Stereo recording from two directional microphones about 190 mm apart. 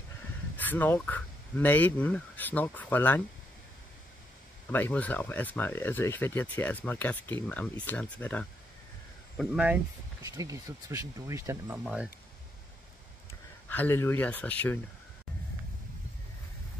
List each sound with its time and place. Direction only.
0.6 s speech: 10° left (ahead or behind)
4.6 s speech: 10° left (ahead or behind)
9.4 s speech: 5° right (ahead or behind)
10.3 s speech: 15° right (ahead or behind)
13.7 s speech: 10° left (ahead or behind)